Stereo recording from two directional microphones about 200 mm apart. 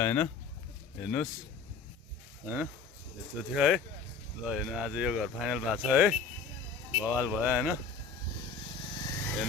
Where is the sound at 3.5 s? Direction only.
Centre (ahead or behind).